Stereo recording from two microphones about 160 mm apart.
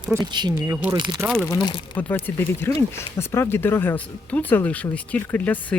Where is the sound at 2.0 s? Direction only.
10° left (ahead or behind).